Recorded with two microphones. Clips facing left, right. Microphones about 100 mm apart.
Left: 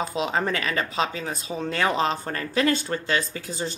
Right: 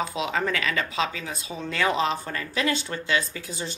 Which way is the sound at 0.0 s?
35° left (ahead or behind).